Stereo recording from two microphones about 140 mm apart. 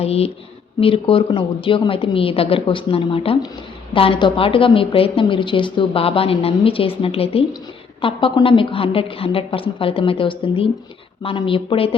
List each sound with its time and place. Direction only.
0.0 s a woman's voice: 45° left (ahead or behind)